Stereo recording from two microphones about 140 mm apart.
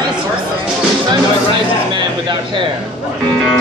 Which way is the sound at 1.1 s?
35° right (ahead or behind).